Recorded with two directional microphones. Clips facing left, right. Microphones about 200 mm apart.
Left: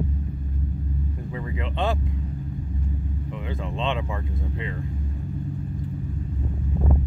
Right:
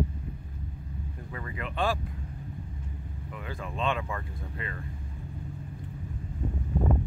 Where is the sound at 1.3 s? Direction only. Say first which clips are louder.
Left 3 dB; 20° left (ahead or behind).